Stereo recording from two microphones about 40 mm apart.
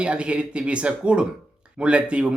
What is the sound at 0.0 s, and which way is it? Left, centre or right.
Speech, right.